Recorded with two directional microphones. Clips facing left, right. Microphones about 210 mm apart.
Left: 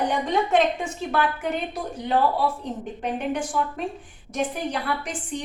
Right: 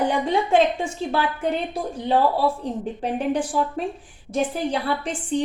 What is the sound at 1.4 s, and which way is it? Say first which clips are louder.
A woman's voice: right 3 dB; 30° right (ahead or behind).